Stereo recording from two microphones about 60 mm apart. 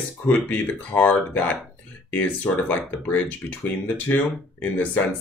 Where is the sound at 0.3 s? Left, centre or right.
Left.